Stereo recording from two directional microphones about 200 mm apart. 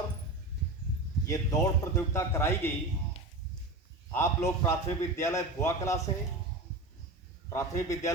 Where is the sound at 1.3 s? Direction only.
15° left (ahead or behind).